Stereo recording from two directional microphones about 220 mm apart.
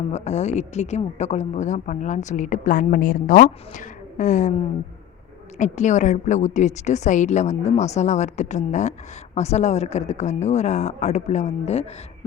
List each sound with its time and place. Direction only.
0.1 s a woman's voice: 30° left (ahead or behind)
5.5 s a woman's voice: 35° left (ahead or behind)